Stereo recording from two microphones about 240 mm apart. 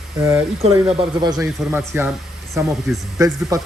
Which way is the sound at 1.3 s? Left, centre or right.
Centre.